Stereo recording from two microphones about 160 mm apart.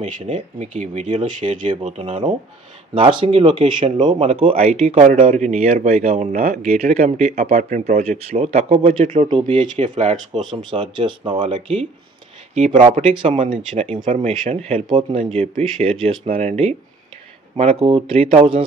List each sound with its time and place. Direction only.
0.0 s speech: 45° right (ahead or behind)
2.9 s speech: 30° right (ahead or behind)
9.8 s speech: 50° right (ahead or behind)
10.4 s speech: 30° right (ahead or behind)
12.5 s speech: 45° right (ahead or behind)
13.0 s speech: 35° right (ahead or behind)